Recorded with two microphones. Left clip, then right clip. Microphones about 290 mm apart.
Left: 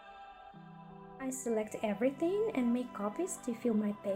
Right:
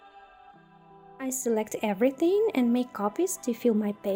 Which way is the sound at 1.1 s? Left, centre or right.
Right.